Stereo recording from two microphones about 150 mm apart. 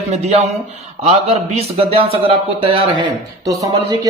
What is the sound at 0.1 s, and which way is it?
A man's voice, 50° right (ahead or behind).